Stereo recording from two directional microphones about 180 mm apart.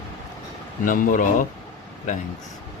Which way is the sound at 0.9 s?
45° left (ahead or behind).